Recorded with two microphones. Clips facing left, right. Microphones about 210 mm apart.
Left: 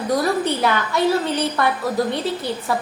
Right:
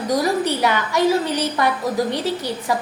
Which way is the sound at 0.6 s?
15° right (ahead or behind).